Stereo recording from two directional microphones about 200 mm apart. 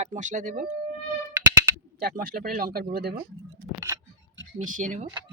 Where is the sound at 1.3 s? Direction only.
15° right (ahead or behind).